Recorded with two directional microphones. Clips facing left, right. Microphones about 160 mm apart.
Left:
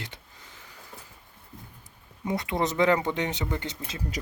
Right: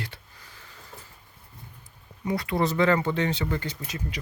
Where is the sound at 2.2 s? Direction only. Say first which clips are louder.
Right 2 dB; 20° left (ahead or behind).